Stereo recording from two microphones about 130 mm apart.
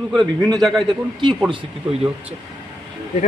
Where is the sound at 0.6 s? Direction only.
Centre (ahead or behind).